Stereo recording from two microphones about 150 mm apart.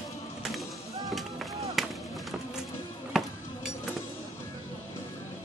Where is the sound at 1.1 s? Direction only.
Centre (ahead or behind).